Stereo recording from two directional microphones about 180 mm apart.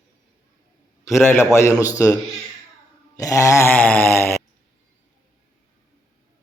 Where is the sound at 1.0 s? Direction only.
15° left (ahead or behind).